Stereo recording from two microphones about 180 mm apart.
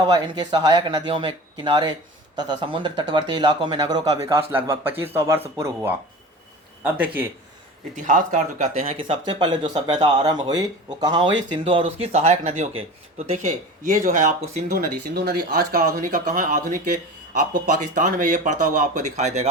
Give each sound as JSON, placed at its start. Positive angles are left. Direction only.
{"t": 0.0, "sound": "speech", "side_deg": -25}
{"t": 7.9, "sound": "speech", "side_deg": -45}
{"t": 9.0, "sound": "speech", "side_deg": -25}
{"t": 14.7, "sound": "speech", "side_deg": -60}